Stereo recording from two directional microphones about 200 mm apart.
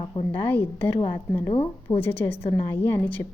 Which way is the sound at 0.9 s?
20° left (ahead or behind).